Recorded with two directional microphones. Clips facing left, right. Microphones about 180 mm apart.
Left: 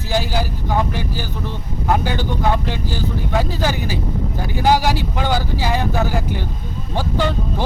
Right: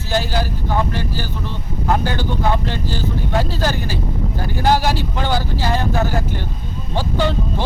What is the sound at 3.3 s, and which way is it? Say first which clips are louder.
Speech: even; 15° left (ahead or behind).